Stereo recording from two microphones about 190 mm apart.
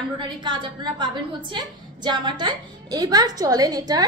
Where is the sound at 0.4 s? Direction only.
25° right (ahead or behind).